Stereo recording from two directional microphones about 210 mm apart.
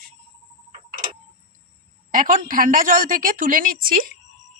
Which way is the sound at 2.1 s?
40° right (ahead or behind).